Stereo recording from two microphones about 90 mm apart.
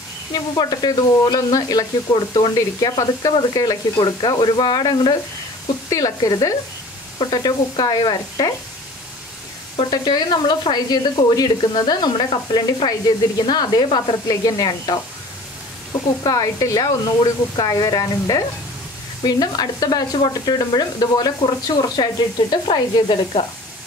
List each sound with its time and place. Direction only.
0.3 s sizzle: 45° left (ahead or behind)
3.0 s sizzle: 45° left (ahead or behind)
3.9 s sizzle: 60° left (ahead or behind)
5.9 s speech: 40° left (ahead or behind)
7.2 s sizzle: 55° left (ahead or behind)
9.8 s sizzle: 50° left (ahead or behind)